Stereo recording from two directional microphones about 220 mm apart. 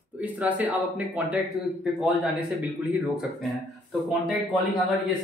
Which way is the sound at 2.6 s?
5° right (ahead or behind).